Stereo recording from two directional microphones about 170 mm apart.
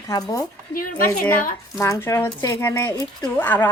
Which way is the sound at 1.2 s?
10° left (ahead or behind).